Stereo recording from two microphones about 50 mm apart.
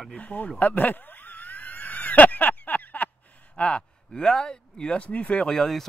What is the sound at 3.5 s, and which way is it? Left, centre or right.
Speech, left.